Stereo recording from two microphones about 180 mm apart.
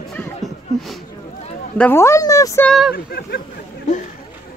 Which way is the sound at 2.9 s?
60° left (ahead or behind).